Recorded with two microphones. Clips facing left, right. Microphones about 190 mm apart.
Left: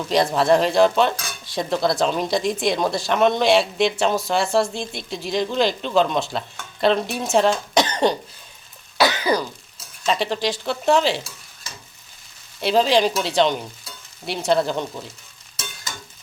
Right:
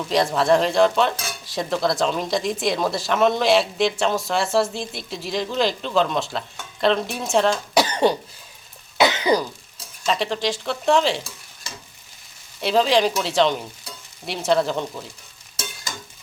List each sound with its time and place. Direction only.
0.1 s stir: centre (ahead or behind)
9.0 s throat clearing: 20° right (ahead or behind)
10.1 s stir: centre (ahead or behind)
12.5 s stir: centre (ahead or behind)